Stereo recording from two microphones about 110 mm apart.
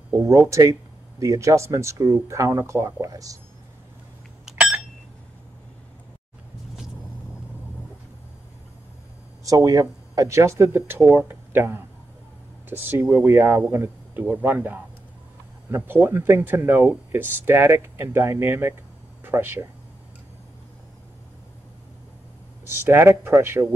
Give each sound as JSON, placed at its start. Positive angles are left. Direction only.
{"t": 0.1, "sound": "speech", "side_deg": -25}
{"t": 4.5, "sound": "a sound", "side_deg": -5}
{"t": 9.4, "sound": "speech", "side_deg": -30}
{"t": 22.8, "sound": "speech", "side_deg": -20}